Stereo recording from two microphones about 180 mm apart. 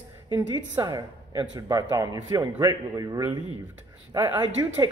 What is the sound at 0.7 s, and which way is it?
A man's voice, 15° right (ahead or behind).